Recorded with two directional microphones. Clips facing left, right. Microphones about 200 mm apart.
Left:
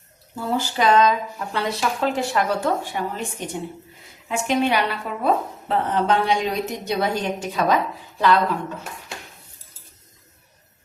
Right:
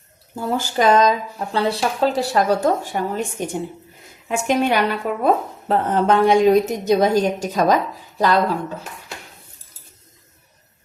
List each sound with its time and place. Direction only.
0.3 s speech: 45° right (ahead or behind)
1.5 s speech: 30° right (ahead or behind)